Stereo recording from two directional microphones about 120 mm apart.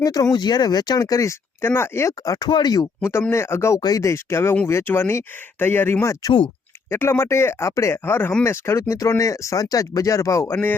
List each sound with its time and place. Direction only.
0.0 s speech: 30° left (ahead or behind)
3.8 s speech: 30° left (ahead or behind)